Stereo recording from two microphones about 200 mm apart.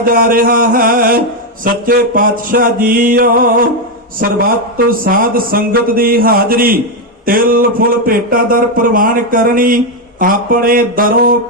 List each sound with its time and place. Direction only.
0.0 s speech: 45° right (ahead or behind)